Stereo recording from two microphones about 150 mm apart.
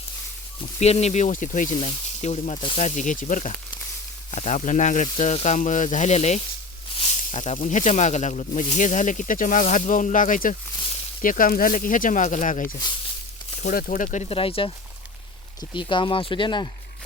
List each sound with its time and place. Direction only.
0.8 s speech: 45° left (ahead or behind)
1.7 s speech: 35° left (ahead or behind)
2.2 s speech: 50° left (ahead or behind)
15.7 s speech: 35° left (ahead or behind)